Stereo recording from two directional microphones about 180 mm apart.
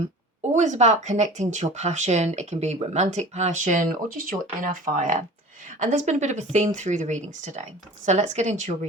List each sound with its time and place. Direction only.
0.5 s speech: 40° right (ahead or behind)